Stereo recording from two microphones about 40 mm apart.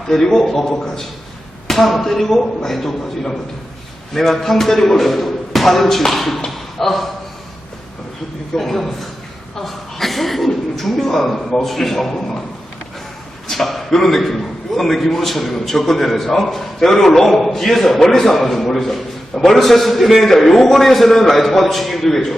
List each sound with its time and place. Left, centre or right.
0.1 s a man's voice: centre
8.5 s a man's voice: centre
13.5 s a man's voice: centre